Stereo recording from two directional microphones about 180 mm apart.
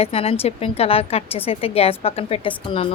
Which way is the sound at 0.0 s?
30° left (ahead or behind).